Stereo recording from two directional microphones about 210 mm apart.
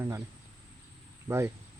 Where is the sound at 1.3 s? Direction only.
15° right (ahead or behind).